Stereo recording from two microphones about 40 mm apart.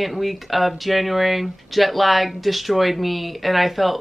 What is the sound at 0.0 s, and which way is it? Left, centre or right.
Speech, centre.